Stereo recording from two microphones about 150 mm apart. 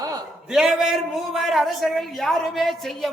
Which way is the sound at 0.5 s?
Centre (ahead or behind).